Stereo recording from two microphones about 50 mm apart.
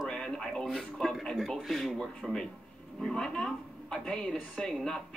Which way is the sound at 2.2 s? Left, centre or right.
Right.